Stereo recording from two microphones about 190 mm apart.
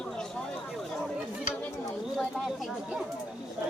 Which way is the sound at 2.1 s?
Centre (ahead or behind).